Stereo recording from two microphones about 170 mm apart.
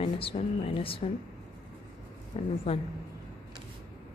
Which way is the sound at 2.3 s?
35° left (ahead or behind).